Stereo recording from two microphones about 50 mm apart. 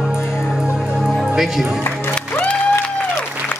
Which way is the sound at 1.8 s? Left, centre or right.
Left.